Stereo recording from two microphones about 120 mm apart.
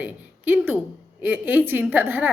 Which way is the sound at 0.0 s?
15° right (ahead or behind).